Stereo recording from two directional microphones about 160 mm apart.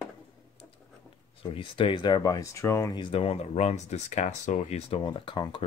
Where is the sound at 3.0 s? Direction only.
35° left (ahead or behind).